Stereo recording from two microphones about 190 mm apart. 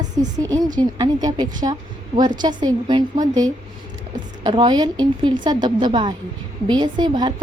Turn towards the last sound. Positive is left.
turn(degrees=-20)  # may be behind; listen again after turning